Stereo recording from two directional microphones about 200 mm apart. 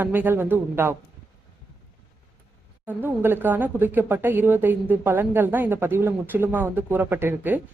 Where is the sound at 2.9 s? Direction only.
10° right (ahead or behind).